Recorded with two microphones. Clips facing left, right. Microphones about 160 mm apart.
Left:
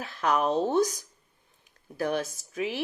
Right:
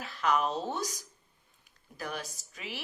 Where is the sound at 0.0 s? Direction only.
50° left (ahead or behind).